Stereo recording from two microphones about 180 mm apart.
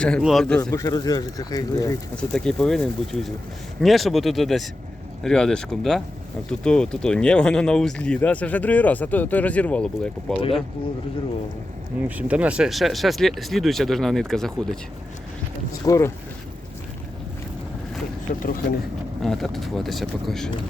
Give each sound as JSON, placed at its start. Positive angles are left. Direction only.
{"t": 0.0, "sound": "speech", "side_deg": 0}
{"t": 0.7, "sound": "speech", "side_deg": 20}
{"t": 2.3, "sound": "speech", "side_deg": 5}
{"t": 12.0, "sound": "speech", "side_deg": -10}
{"t": 15.9, "sound": "speech", "side_deg": 15}
{"t": 19.2, "sound": "speech", "side_deg": 0}